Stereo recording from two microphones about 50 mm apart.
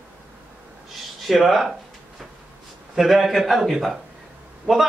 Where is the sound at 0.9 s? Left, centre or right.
Centre.